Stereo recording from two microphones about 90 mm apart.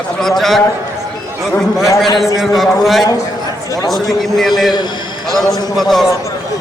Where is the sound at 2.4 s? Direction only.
Centre (ahead or behind).